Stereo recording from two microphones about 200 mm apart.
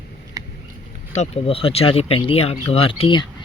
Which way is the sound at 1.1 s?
35° left (ahead or behind).